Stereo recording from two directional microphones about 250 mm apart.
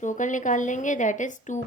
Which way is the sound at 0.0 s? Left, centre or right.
Left.